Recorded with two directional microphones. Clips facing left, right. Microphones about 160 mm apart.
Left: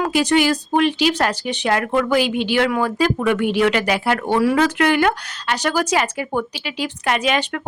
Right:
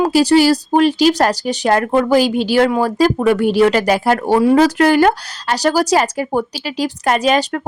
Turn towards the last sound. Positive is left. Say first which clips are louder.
# right 5 dB
turn(degrees=-40)  # may be behind; listen again after turning